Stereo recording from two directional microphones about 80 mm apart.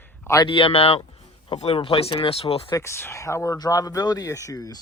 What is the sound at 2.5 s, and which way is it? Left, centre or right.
Speech, left.